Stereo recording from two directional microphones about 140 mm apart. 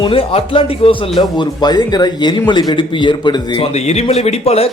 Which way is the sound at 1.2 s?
30° left (ahead or behind).